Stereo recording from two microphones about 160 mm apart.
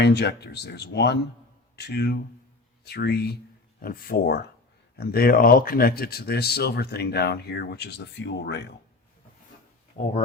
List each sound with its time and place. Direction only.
0.0 s speech: 90° left
3.8 s speech: 65° left (ahead or behind); by 8.7 s 90° left